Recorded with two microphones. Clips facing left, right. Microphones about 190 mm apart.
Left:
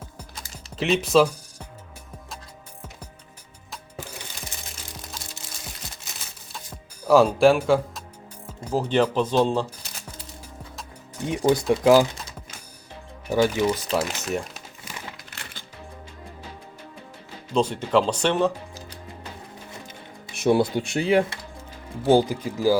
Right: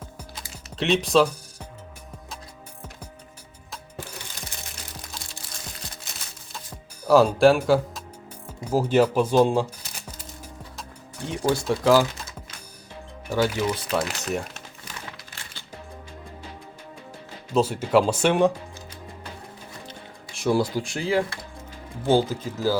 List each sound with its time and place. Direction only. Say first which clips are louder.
0.8 s speech: left 1 dB; centre (ahead or behind)
7.1 s speech: even; centre (ahead or behind)
11.3 s speech: left 3 dB; 20° left (ahead or behind)
13.3 s speech: left 3 dB; 10° left (ahead or behind)
17.5 s speech: right 1 dB; 5° right (ahead or behind)
20.3 s speech: left 3 dB; 20° left (ahead or behind)